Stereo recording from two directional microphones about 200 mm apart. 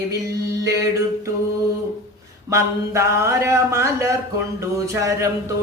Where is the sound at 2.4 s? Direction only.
15° right (ahead or behind).